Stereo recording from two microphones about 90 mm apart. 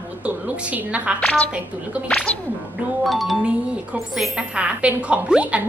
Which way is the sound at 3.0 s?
Centre (ahead or behind).